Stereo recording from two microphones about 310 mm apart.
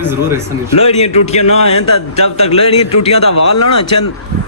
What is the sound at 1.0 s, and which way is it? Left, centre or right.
Speech, left.